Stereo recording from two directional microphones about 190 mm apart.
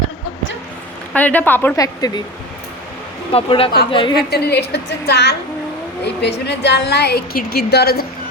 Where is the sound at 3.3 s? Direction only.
30° left (ahead or behind).